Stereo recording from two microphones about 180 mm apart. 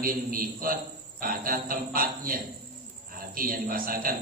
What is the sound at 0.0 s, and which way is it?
A man's voice, 50° right (ahead or behind).